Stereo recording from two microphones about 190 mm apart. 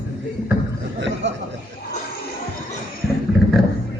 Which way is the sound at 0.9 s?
70° right (ahead or behind).